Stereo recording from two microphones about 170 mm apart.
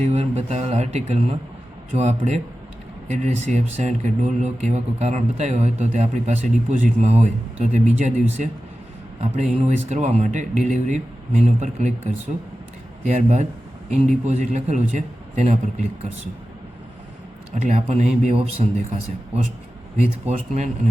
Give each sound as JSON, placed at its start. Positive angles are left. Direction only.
{"t": 0.0, "sound": "speech", "side_deg": -40}
{"t": 13.1, "sound": "speech", "side_deg": -45}
{"t": 17.5, "sound": "speech", "side_deg": -45}
{"t": 20.2, "sound": "speech", "side_deg": -40}